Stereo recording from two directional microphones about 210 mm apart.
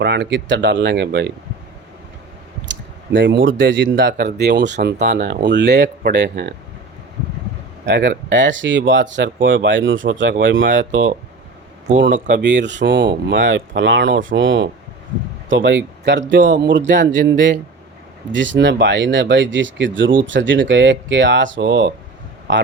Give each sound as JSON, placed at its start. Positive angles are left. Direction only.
{"t": 0.0, "sound": "speech", "side_deg": -55}
{"t": 2.6, "sound": "speech", "side_deg": -60}
{"t": 7.9, "sound": "speech", "side_deg": -55}
{"t": 12.4, "sound": "speech", "side_deg": -55}